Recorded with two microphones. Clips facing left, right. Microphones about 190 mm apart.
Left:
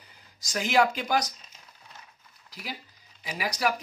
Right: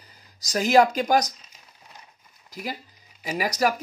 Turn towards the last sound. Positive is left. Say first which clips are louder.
# right 5 dB
turn(degrees=-45)  # may be behind; listen again after turning